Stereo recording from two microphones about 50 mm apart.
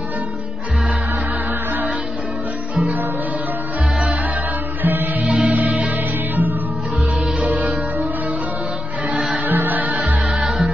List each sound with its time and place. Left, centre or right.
2.7 s music: right
4.8 s music: right
5.2 s music: right
7.5 s music: right
9.5 s music: right
10.3 s music: centre